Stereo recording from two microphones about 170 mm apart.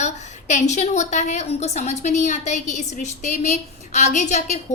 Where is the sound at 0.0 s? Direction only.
45° left (ahead or behind).